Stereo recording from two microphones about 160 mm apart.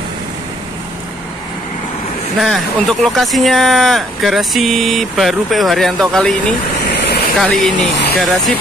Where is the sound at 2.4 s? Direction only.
Centre (ahead or behind).